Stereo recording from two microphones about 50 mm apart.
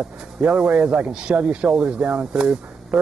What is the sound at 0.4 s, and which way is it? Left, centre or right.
Speech, centre.